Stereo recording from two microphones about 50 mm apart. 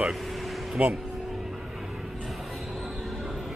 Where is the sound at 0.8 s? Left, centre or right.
Right.